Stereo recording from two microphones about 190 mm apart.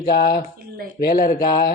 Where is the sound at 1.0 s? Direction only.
45° left (ahead or behind).